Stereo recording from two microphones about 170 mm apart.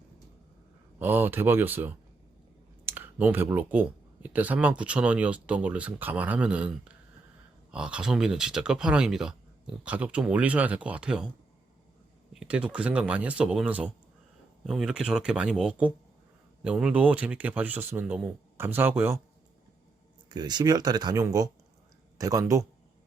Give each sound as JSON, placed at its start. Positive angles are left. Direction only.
{"t": 0.9, "sound": "speech", "side_deg": -10}
{"t": 12.3, "sound": "speech", "side_deg": -5}
{"t": 20.3, "sound": "speech", "side_deg": -25}